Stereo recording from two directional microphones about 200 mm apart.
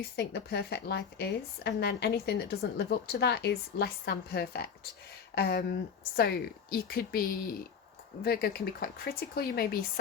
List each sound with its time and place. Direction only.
0.2 s speech: 55° left (ahead or behind)